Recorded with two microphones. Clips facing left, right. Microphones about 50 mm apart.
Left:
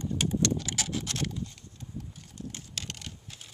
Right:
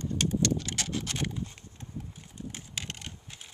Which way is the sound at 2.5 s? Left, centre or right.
Centre.